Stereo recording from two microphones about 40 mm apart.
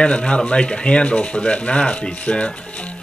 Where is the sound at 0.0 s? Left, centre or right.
Left.